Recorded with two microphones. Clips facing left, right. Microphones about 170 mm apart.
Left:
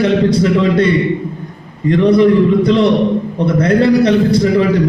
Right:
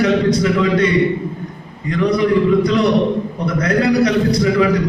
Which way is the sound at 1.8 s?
30° left (ahead or behind).